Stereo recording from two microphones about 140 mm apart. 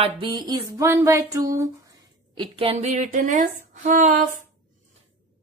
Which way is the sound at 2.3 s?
35° right (ahead or behind).